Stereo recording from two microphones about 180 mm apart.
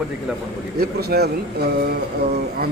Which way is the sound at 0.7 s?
60° right (ahead or behind).